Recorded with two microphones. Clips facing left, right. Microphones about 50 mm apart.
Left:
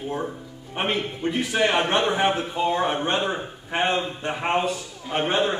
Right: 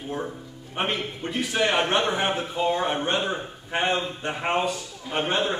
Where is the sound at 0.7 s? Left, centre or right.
Centre.